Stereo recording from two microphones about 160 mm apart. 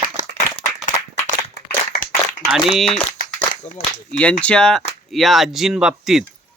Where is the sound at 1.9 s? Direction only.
80° left.